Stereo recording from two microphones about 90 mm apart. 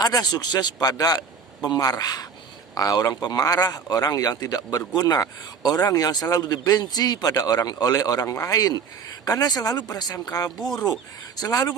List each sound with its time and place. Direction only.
0.0 s a man's voice: 45° left (ahead or behind)